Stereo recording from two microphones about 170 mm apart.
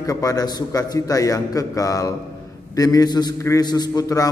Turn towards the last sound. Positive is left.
turn(degrees=20)  # may be behind; listen again after turning